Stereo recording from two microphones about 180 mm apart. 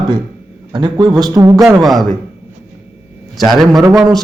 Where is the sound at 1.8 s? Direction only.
Centre (ahead or behind).